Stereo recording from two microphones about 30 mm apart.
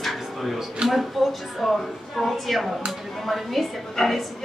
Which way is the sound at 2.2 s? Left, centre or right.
Centre.